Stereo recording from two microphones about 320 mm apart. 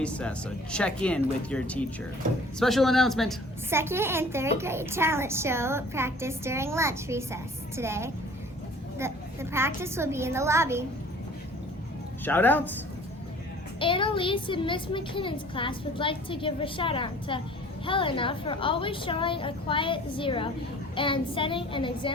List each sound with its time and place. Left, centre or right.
0.0 s a woman's voice: centre
12.2 s speech: centre
13.7 s speech: centre